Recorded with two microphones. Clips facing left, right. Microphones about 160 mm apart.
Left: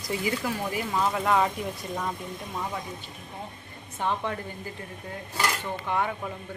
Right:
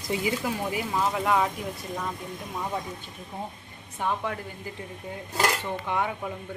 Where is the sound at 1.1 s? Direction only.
5° right (ahead or behind).